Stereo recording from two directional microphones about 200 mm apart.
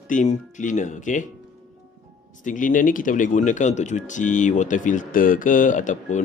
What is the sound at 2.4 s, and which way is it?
Speech, 40° left (ahead or behind).